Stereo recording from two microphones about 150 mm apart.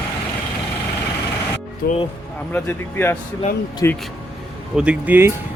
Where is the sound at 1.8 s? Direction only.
90° left.